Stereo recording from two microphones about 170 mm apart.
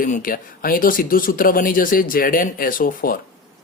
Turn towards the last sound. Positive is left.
turn(degrees=55)  # may be behind; listen again after turning